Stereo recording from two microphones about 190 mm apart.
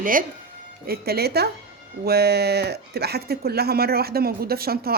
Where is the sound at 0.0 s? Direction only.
45° right (ahead or behind).